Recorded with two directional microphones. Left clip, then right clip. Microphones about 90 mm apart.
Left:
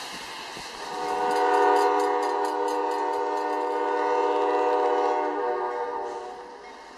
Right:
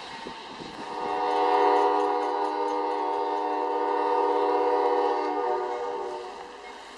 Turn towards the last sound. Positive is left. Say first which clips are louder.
# left 1 dB
turn(degrees=-20)  # may be behind; listen again after turning